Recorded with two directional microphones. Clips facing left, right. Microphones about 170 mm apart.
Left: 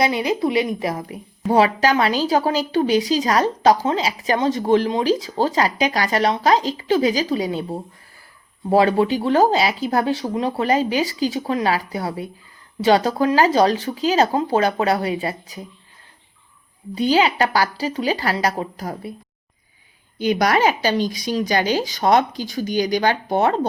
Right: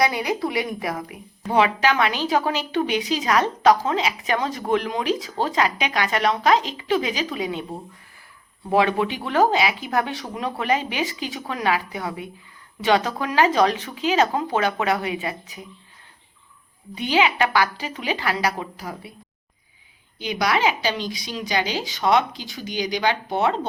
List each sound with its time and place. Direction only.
0.0 s a woman's voice: 25° left (ahead or behind)
16.9 s speech: 35° left (ahead or behind)
20.1 s a woman's voice: 50° left (ahead or behind)